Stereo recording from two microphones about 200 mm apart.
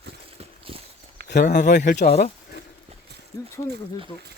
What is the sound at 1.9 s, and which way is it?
Speech, 40° left (ahead or behind).